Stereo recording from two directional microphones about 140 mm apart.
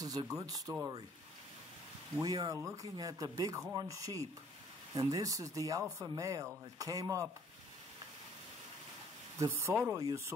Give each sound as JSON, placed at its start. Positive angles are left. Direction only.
{"t": 0.0, "sound": "speech", "side_deg": -25}
{"t": 2.2, "sound": "speech", "side_deg": -25}
{"t": 9.4, "sound": "speech", "side_deg": -20}